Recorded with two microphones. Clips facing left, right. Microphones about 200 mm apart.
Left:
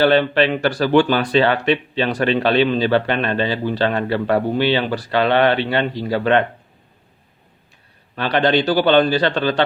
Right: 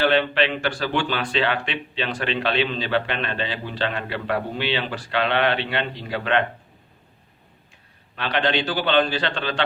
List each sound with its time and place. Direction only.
0.0 s speech: 40° left (ahead or behind)
8.1 s speech: 40° left (ahead or behind)